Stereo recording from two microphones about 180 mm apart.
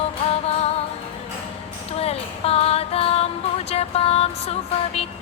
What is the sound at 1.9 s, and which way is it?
Music, 35° left (ahead or behind).